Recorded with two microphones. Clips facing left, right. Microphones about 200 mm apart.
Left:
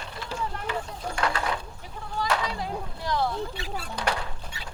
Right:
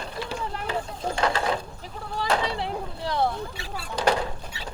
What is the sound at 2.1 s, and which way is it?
Sheep, 35° right (ahead or behind).